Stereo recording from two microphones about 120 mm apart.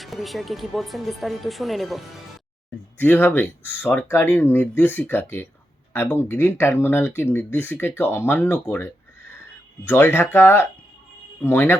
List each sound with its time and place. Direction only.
0.0 s speech: centre (ahead or behind)
3.0 s speech: 15° left (ahead or behind)